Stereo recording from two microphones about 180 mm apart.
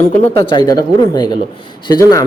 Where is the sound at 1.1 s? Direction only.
20° left (ahead or behind).